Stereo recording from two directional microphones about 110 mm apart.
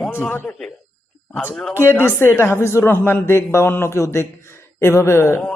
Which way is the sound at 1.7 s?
20° left (ahead or behind).